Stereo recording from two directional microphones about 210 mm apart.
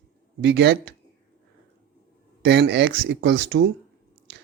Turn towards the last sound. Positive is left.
turn(degrees=-55)  # may be behind; listen again after turning